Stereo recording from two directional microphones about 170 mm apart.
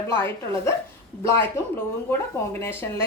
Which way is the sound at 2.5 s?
15° left (ahead or behind).